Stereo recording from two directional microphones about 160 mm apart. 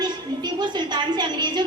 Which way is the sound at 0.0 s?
25° right (ahead or behind).